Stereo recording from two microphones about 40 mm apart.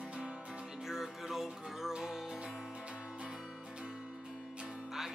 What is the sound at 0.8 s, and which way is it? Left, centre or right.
Music, centre.